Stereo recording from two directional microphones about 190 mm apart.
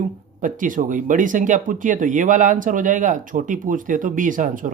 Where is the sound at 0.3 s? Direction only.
45° right (ahead or behind).